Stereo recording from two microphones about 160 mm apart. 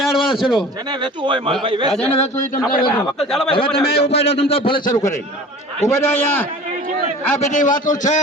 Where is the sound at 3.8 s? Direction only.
90° left.